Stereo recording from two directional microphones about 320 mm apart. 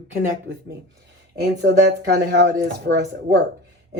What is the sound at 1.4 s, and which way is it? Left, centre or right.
Speech, right.